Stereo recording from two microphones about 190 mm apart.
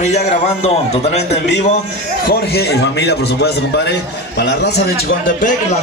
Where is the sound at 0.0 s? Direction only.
35° left (ahead or behind).